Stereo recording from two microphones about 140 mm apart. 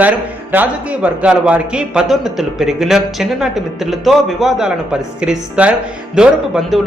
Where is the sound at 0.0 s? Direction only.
10° right (ahead or behind).